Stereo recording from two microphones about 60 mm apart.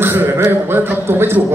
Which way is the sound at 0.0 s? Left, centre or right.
Right.